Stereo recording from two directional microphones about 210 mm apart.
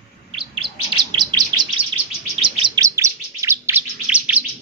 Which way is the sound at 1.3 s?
25° right (ahead or behind).